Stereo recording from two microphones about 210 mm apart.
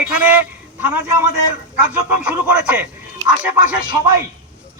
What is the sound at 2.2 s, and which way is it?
Speech, 5° right (ahead or behind).